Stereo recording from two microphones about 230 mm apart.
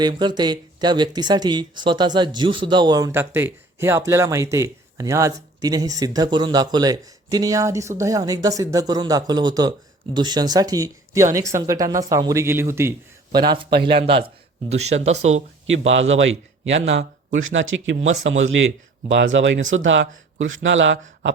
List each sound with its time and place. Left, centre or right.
0.0 s speech: centre
15.6 s speech: right